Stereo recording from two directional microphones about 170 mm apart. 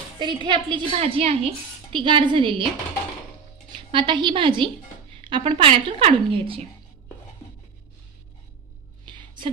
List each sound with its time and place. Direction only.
0.2 s a woman's voice: 25° right (ahead or behind)
3.9 s a woman's voice: 30° right (ahead or behind)
9.0 s a sound: 30° right (ahead or behind)